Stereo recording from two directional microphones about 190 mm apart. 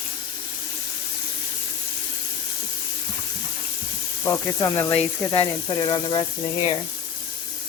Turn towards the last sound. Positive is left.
turn(degrees=25)  # may be behind; listen again after turning